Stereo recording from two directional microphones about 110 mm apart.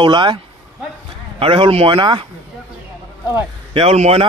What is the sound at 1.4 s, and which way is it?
Speech, 55° right (ahead or behind).